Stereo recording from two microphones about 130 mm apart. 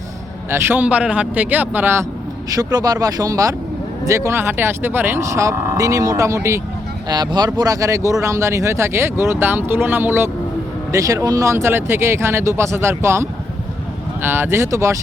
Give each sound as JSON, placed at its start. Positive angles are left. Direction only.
{"t": 0.5, "sound": "speech", "side_deg": -15}
{"t": 2.6, "sound": "speech", "side_deg": -30}
{"t": 7.1, "sound": "speech", "side_deg": -35}
{"t": 10.9, "sound": "speech", "side_deg": -25}